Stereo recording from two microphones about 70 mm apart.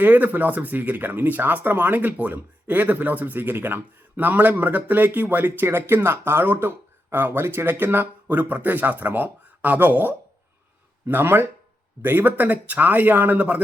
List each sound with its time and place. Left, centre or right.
0.0 s speech: right